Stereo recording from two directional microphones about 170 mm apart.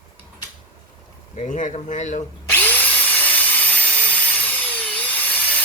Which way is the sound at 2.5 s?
10° left (ahead or behind).